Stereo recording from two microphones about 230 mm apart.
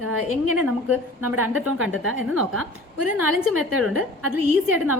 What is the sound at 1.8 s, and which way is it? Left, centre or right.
Speech, right.